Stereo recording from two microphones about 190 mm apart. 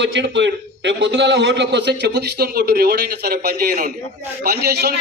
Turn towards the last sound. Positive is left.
turn(degrees=-55)  # may be behind; listen again after turning